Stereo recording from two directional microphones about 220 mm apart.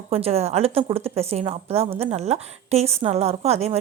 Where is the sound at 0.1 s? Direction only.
25° right (ahead or behind).